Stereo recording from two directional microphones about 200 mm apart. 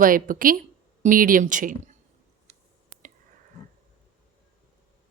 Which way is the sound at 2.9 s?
80° right.